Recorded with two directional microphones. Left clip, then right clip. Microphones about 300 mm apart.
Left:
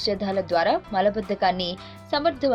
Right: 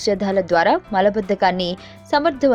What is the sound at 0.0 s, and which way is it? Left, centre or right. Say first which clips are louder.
A woman's voice: right 6 dB; centre.